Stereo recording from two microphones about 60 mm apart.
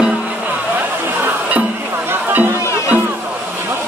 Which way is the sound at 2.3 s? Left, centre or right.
Right.